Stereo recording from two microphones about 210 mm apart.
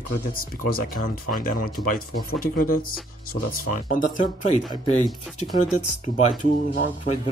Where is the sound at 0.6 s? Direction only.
45° left (ahead or behind).